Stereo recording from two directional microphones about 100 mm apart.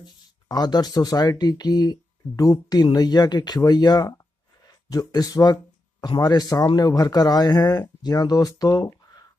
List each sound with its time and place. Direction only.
0.0 s speech: 45° left (ahead or behind)